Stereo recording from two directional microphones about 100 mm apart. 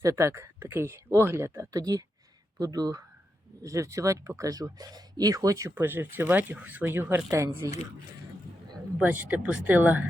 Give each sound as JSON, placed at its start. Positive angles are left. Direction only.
{"t": 0.0, "sound": "speech", "side_deg": -30}
{"t": 5.7, "sound": "speech", "side_deg": -20}
{"t": 9.0, "sound": "speech", "side_deg": -15}